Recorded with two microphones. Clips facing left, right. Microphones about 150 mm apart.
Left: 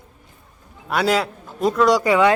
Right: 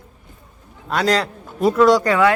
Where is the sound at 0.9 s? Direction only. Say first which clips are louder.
Right 1 dB; 5° left (ahead or behind).